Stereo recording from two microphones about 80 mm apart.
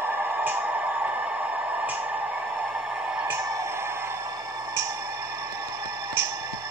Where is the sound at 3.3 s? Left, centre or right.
Right.